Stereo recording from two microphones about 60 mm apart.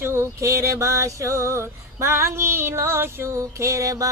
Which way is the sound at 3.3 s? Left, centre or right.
Right.